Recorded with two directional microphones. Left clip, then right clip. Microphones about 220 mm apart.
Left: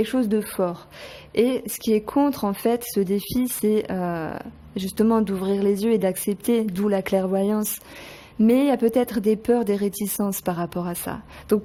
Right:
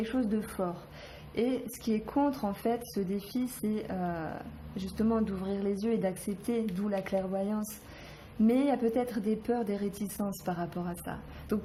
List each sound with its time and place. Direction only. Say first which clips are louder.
0.0 s speech: left 10 dB; 50° left (ahead or behind)